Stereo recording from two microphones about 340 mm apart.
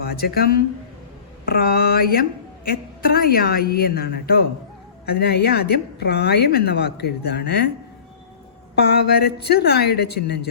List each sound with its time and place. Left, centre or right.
0.0 s a woman's voice: left
8.7 s a woman's voice: left